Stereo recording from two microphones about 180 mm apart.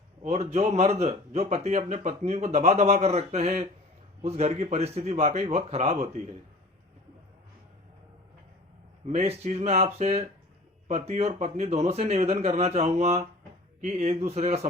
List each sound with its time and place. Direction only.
0.2 s speech: 35° right (ahead or behind)
9.0 s speech: 35° right (ahead or behind)